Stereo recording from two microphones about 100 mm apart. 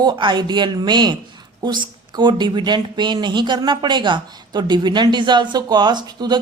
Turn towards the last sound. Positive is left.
turn(degrees=-45)  # may be behind; listen again after turning